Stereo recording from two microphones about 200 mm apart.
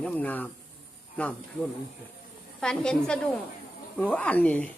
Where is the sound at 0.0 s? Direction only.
10° left (ahead or behind).